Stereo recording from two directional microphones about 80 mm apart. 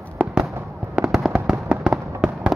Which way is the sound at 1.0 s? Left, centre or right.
Centre.